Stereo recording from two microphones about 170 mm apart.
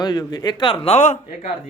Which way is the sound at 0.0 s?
25° left (ahead or behind).